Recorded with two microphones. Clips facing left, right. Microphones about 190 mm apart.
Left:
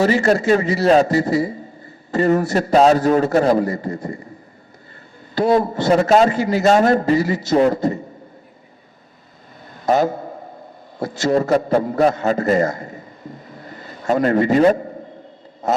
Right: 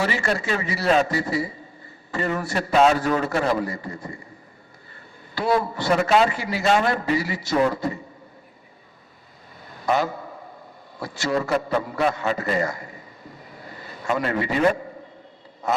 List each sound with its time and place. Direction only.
0.0 s a man's voice: 40° left (ahead or behind)
5.5 s a man's voice: 45° left (ahead or behind)
9.8 s a sound: 45° left (ahead or behind)
11.0 s a man's voice: 45° left (ahead or behind)
13.7 s a sound: 45° left (ahead or behind)
14.6 s a man's voice: 40° left (ahead or behind)